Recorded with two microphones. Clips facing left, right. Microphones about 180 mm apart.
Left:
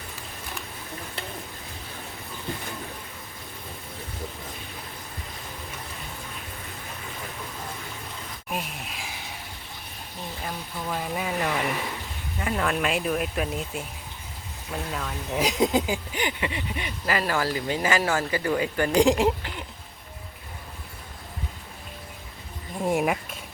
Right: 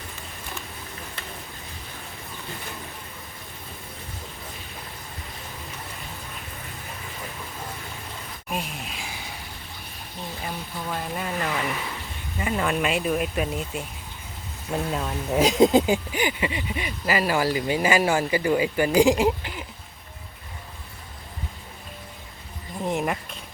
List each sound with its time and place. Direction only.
8.4 s a sound: centre (ahead or behind)
10.4 s speech: 5° left (ahead or behind)
14.7 s speech: 25° right (ahead or behind)
16.1 s speech: 5° right (ahead or behind)
22.8 s speech: 5° left (ahead or behind)